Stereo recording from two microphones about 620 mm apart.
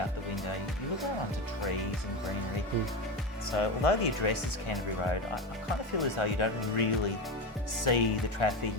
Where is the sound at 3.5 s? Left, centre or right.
Left.